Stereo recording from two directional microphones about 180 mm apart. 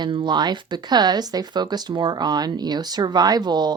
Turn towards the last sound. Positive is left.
turn(degrees=-25)  # may be behind; listen again after turning